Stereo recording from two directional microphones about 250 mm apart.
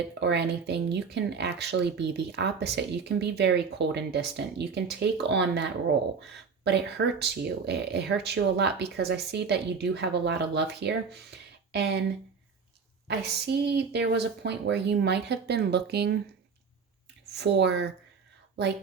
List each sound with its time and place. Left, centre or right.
0.1 s speech: right
6.7 s speech: right
13.1 s speech: right
17.3 s speech: right